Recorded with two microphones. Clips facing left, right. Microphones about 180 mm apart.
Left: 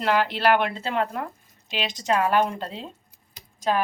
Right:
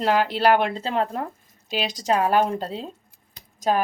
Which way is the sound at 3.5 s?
40° right (ahead or behind).